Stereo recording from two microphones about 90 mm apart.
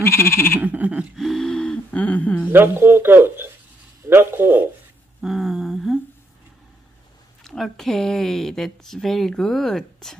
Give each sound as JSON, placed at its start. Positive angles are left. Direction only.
{"t": 0.0, "sound": "frog", "side_deg": 30}
{"t": 0.6, "sound": "sheep", "side_deg": -20}
{"t": 1.1, "sound": "a sound", "side_deg": 0}
{"t": 1.9, "sound": "a sound", "side_deg": 15}
{"t": 2.5, "sound": "speech", "side_deg": -25}
{"t": 5.2, "sound": "speech", "side_deg": 0}
{"t": 7.4, "sound": "speech", "side_deg": 5}